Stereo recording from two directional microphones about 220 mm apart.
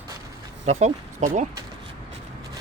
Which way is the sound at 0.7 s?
30° right (ahead or behind).